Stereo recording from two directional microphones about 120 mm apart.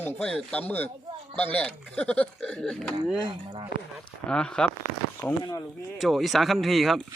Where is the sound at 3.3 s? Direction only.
45° right (ahead or behind).